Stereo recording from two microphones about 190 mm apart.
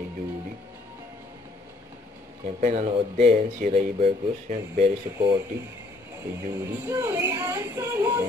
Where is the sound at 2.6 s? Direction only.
40° right (ahead or behind).